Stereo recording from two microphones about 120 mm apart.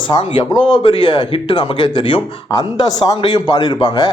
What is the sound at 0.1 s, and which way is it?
Speech, 40° left (ahead or behind).